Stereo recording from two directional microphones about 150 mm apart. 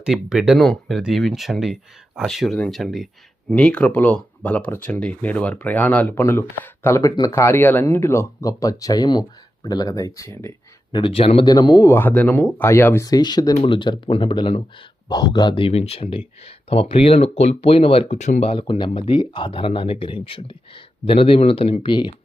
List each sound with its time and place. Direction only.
0.0 s speech: 5° right (ahead or behind); by 10.5 s 20° left (ahead or behind)
10.9 s speech: 35° left (ahead or behind)
11.4 s speech: 25° left (ahead or behind)
11.9 s speech: 15° left (ahead or behind); by 22.1 s 30° left (ahead or behind)